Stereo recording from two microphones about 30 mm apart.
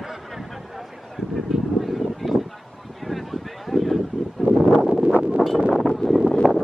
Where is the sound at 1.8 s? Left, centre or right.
Centre.